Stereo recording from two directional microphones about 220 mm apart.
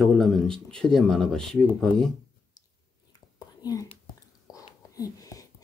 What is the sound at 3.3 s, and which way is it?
Whispering, 15° left (ahead or behind).